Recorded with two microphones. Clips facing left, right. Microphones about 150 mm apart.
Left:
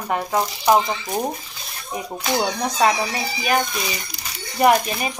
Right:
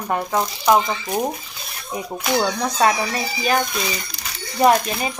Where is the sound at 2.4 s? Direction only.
20° left (ahead or behind).